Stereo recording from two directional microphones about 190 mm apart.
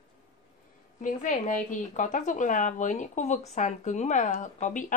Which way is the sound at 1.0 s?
45° left (ahead or behind).